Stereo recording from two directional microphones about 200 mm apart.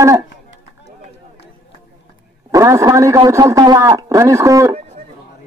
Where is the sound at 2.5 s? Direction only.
15° right (ahead or behind).